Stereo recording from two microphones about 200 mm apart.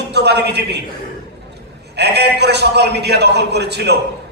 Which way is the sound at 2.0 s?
55° right (ahead or behind).